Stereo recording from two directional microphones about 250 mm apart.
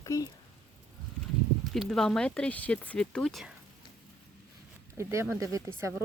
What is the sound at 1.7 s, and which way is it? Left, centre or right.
Speech, centre.